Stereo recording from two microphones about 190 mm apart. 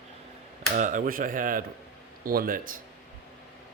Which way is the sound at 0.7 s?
40° right (ahead or behind).